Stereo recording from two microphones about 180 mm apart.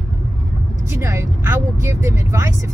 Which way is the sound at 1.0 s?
15° right (ahead or behind).